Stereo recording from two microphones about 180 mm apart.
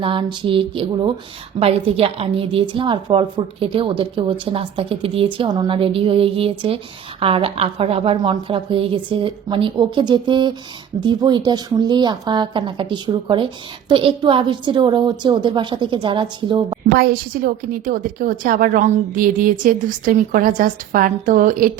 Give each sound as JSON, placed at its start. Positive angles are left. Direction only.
{"t": 0.0, "sound": "a woman's voice", "side_deg": -25}
{"t": 16.9, "sound": "a woman's voice", "side_deg": -55}